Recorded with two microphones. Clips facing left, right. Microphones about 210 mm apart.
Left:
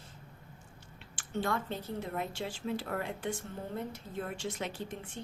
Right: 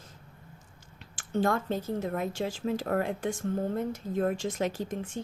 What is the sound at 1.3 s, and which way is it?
A woman's voice, 40° right (ahead or behind).